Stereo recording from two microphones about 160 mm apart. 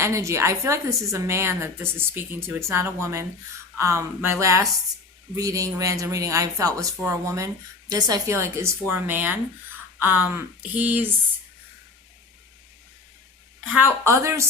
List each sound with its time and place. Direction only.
0.0 s speech: 20° right (ahead or behind)
13.7 s speech: 15° right (ahead or behind)